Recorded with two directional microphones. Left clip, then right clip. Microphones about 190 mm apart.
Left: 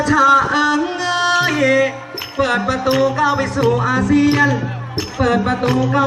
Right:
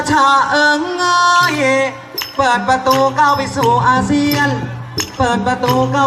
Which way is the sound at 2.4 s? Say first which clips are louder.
Right 4 dB; 25° right (ahead or behind).